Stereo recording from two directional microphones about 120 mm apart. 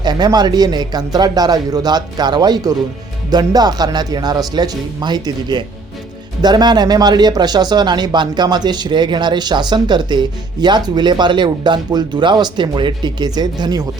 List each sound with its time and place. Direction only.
0.0 s speech: 35° right (ahead or behind)